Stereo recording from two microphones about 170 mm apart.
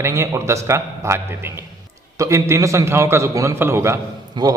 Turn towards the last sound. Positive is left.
turn(degrees=-20)  # may be behind; listen again after turning